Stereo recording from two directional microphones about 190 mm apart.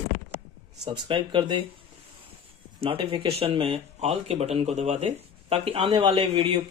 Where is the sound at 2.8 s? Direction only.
25° right (ahead or behind).